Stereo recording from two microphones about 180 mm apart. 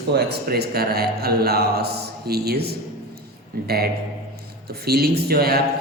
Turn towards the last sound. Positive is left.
turn(degrees=-60)  # may be behind; listen again after turning